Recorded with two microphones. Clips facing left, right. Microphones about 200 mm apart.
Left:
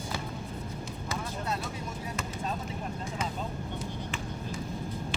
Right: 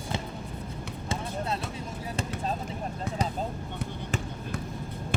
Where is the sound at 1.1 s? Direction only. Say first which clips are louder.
Right 3 dB; 30° right (ahead or behind).